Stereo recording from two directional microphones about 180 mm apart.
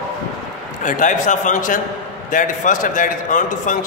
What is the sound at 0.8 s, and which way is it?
A man's voice, 45° left (ahead or behind).